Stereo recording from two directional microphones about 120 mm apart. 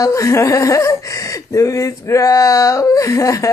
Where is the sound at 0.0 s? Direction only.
25° left (ahead or behind).